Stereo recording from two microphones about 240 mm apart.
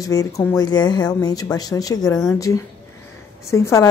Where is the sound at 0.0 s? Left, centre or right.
Centre.